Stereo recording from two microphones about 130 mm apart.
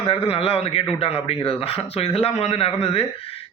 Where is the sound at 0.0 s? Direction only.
45° left (ahead or behind).